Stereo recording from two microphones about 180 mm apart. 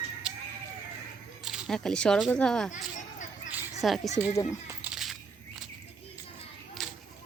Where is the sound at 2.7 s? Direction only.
45° left (ahead or behind).